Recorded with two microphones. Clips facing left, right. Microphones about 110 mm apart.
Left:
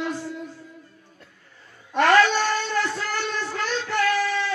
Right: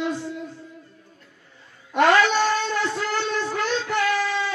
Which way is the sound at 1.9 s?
15° right (ahead or behind).